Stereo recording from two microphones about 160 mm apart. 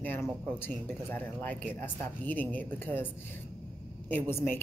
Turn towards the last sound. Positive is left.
turn(degrees=15)  # may be behind; listen again after turning